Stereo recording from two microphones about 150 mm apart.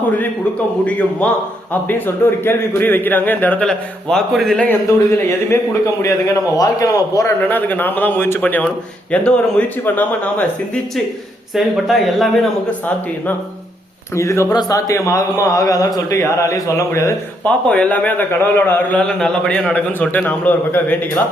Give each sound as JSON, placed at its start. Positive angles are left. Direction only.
{"t": 0.9, "sound": "speech", "side_deg": 10}
{"t": 7.4, "sound": "speech", "side_deg": 10}
{"t": 11.5, "sound": "speech", "side_deg": 0}
{"t": 14.2, "sound": "a man's voice", "side_deg": 20}
{"t": 17.4, "sound": "speech", "side_deg": 10}